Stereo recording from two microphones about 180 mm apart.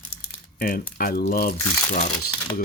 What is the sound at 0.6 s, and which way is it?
Speech, 50° left (ahead or behind).